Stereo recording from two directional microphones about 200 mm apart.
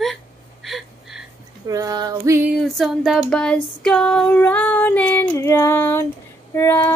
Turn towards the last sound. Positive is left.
turn(degrees=10)  # may be behind; listen again after turning